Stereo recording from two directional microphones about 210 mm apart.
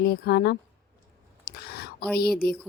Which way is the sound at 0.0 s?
50° left (ahead or behind).